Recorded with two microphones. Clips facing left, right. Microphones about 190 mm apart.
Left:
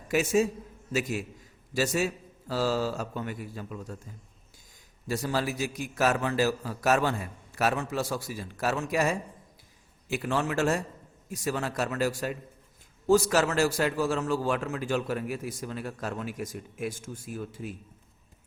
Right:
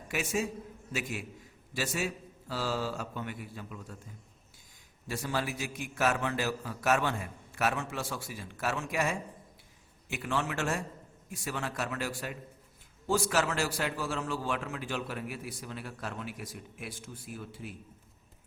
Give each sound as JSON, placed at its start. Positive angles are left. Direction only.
{"t": 0.1, "sound": "a man's voice", "side_deg": 40}
{"t": 1.7, "sound": "a man's voice", "side_deg": 40}
{"t": 5.0, "sound": "a man's voice", "side_deg": 40}